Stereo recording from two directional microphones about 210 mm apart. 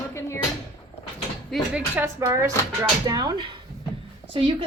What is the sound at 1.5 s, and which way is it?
Speech, centre (ahead or behind).